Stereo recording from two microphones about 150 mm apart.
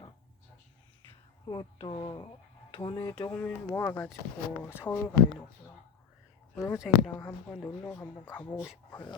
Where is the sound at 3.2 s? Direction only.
10° left (ahead or behind).